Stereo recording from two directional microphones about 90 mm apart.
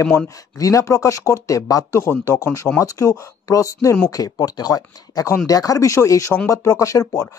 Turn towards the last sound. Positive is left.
turn(degrees=35)  # may be behind; listen again after turning